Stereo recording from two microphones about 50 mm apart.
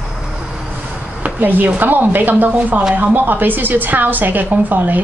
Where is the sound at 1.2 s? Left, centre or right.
Right.